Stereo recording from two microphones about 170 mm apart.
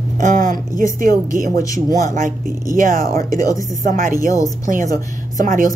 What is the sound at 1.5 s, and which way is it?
Speech, 20° left (ahead or behind).